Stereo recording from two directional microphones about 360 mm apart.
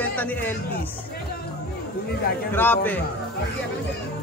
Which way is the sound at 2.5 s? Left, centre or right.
Centre.